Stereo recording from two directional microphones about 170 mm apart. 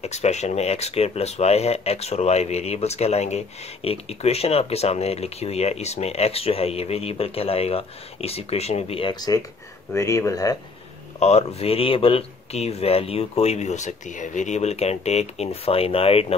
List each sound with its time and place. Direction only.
0.0 s speech: 40° left (ahead or behind); by 10.6 s 20° left (ahead or behind)
11.1 s speech: 40° left (ahead or behind)